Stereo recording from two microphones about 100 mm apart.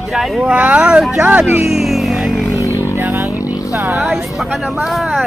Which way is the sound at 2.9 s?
25° right (ahead or behind).